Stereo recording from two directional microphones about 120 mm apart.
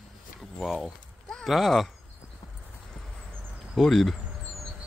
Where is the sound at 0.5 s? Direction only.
Centre (ahead or behind).